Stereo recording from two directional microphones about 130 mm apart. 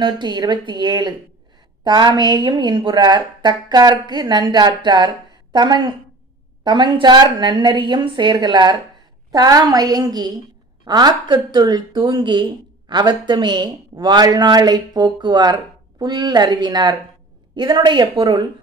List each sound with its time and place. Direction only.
0.0 s a woman's voice: 35° right (ahead or behind)